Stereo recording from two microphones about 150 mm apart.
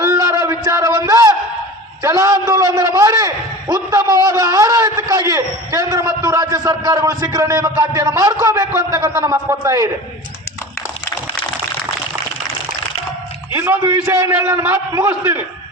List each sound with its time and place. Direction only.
0.0 s a sound: 20° right (ahead or behind)
2.0 s a man's voice: 25° right (ahead or behind)
13.5 s a man's voice: 15° right (ahead or behind)